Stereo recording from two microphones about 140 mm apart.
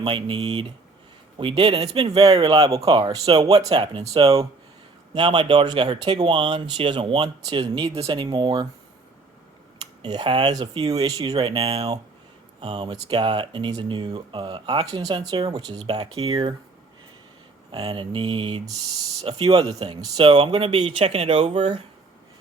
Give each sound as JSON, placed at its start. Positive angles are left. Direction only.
{"t": 0.0, "sound": "speech", "side_deg": -35}
{"t": 5.1, "sound": "speech", "side_deg": -35}
{"t": 9.8, "sound": "speech", "side_deg": -30}
{"t": 12.5, "sound": "speech", "side_deg": -35}
{"t": 17.7, "sound": "speech", "side_deg": -35}